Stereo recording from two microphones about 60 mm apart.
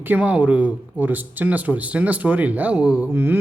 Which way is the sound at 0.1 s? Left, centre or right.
Right.